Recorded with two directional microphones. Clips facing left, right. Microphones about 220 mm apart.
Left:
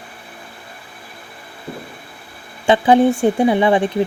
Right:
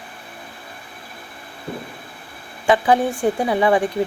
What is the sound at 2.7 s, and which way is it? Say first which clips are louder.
Speech: left 4 dB; 25° left (ahead or behind).